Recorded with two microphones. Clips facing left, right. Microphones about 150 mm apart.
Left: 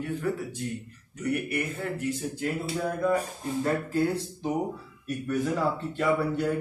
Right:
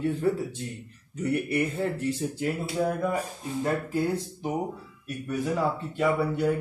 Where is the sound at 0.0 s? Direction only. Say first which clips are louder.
Right 4 dB; 30° right (ahead or behind).